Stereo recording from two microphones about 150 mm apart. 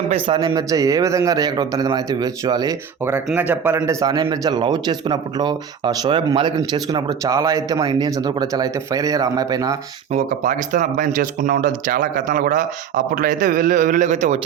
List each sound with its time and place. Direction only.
0.3 s speech: 25° right (ahead or behind)
3.3 s speech: 10° right (ahead or behind)
3.8 s speech: 25° right (ahead or behind)
10.1 s speech: 55° right (ahead or behind)